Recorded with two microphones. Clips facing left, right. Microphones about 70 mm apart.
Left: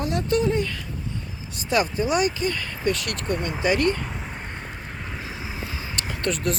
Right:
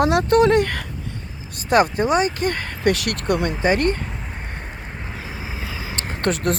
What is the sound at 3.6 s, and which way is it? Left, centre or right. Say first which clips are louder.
Speech: right 1 dB; right.